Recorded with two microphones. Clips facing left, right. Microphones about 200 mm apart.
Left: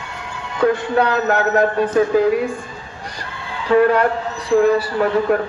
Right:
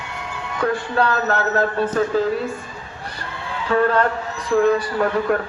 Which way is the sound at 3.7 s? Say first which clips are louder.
Left 4 dB; 10° left (ahead or behind).